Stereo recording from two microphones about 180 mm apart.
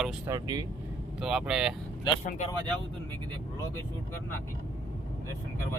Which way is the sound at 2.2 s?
40° left (ahead or behind).